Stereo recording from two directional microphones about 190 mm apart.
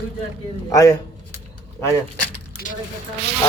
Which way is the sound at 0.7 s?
20° left (ahead or behind).